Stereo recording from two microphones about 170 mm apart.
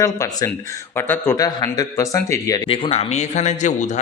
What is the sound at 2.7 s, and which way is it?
A man's voice, 35° left (ahead or behind).